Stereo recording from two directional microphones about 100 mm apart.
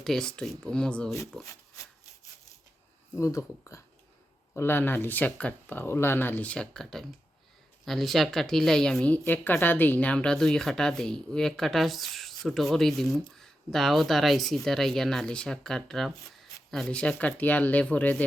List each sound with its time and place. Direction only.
0.0 s a woman's voice: 5° left (ahead or behind)
3.2 s speech: 30° left (ahead or behind)
4.5 s a woman's voice: 20° left (ahead or behind)